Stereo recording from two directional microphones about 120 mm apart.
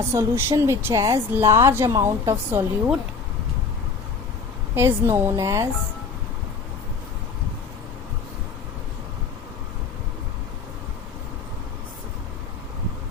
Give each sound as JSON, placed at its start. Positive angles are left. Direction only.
{"t": 0.1, "sound": "a woman's voice", "side_deg": -20}
{"t": 4.7, "sound": "a woman's voice", "side_deg": -20}